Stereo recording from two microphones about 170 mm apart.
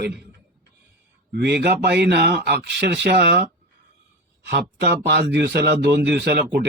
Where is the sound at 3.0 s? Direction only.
75° right (ahead or behind).